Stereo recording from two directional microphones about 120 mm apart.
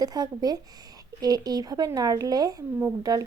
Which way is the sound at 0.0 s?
35° right (ahead or behind).